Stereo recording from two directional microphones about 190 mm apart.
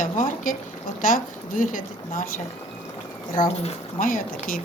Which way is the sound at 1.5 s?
45° left (ahead or behind).